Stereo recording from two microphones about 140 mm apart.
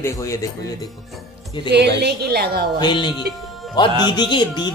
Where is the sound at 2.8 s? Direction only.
35° left (ahead or behind).